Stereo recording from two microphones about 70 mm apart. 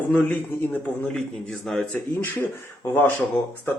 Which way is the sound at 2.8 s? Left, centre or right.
Left.